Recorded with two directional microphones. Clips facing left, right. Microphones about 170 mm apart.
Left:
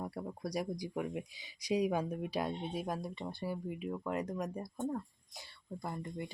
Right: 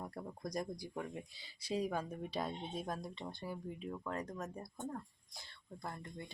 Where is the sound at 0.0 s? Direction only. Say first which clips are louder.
Left 4 dB; 10° left (ahead or behind).